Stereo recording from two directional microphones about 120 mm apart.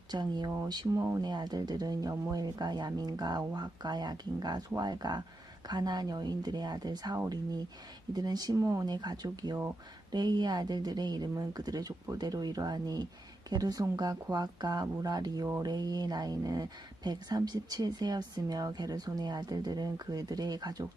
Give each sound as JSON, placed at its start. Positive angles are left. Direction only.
{"t": 0.1, "sound": "speech", "side_deg": -35}
{"t": 8.9, "sound": "speech", "side_deg": -35}